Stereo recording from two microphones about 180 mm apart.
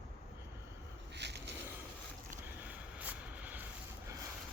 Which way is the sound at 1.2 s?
70° right (ahead or behind).